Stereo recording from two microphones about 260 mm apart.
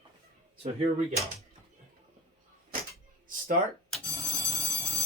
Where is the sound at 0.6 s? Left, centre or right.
Right.